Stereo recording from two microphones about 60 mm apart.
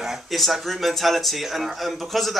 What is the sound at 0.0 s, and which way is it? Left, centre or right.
Speech, centre.